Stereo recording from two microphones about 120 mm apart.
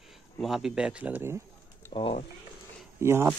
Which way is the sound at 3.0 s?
20° right (ahead or behind).